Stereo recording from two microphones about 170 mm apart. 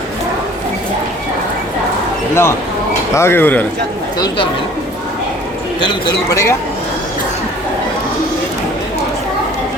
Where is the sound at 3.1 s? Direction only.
15° left (ahead or behind).